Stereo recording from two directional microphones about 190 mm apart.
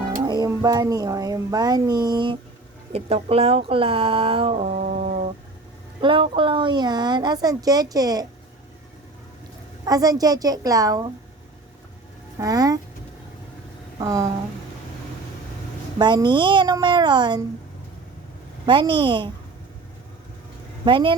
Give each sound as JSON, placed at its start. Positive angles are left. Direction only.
{"t": 0.2, "sound": "speech", "side_deg": -20}
{"t": 9.8, "sound": "speech", "side_deg": -20}
{"t": 12.4, "sound": "speech", "side_deg": -20}
{"t": 14.0, "sound": "a sound", "side_deg": -20}
{"t": 16.0, "sound": "speech", "side_deg": -25}
{"t": 18.6, "sound": "speech", "side_deg": -25}
{"t": 20.8, "sound": "speech", "side_deg": -25}